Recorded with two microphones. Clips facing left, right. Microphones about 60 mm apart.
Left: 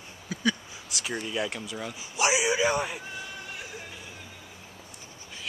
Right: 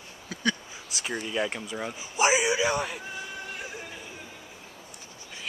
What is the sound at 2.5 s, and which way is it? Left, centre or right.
Speech, centre.